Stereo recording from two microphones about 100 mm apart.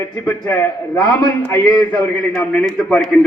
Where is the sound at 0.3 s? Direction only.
25° left (ahead or behind).